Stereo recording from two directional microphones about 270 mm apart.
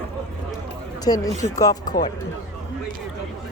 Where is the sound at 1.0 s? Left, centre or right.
Centre.